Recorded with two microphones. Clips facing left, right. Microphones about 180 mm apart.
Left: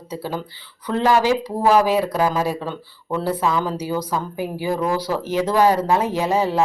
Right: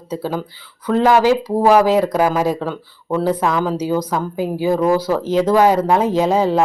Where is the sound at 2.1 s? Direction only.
15° right (ahead or behind).